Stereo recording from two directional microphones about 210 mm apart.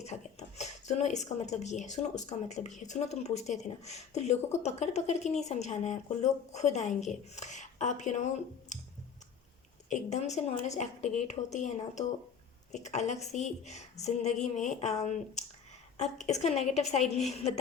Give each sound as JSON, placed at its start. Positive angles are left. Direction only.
{"t": 0.0, "sound": "speech", "side_deg": 30}
{"t": 9.9, "sound": "speech", "side_deg": 30}